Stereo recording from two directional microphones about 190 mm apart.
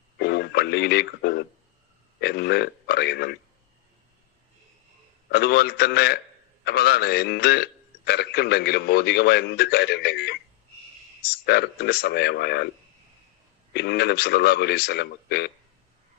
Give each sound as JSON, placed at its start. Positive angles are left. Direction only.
{"t": 0.2, "sound": "a man's voice", "side_deg": 60}
{"t": 5.3, "sound": "a man's voice", "side_deg": 60}
{"t": 13.7, "sound": "a man's voice", "side_deg": 60}